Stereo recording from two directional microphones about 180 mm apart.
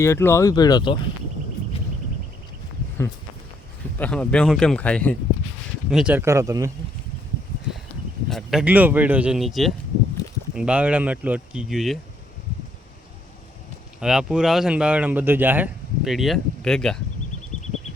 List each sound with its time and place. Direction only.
0.0 s speech: 15° left (ahead or behind)
3.0 s speech: 15° left (ahead or behind)
5.9 s speech: 5° right (ahead or behind)
8.3 s speech: centre (ahead or behind)
14.0 s speech: 5° right (ahead or behind)